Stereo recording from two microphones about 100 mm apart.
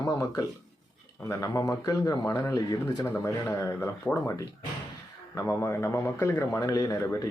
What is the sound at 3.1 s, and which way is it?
A man's voice, 25° left (ahead or behind).